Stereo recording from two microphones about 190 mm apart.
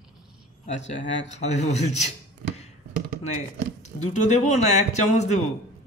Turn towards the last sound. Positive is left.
turn(degrees=35)  # may be behind; listen again after turning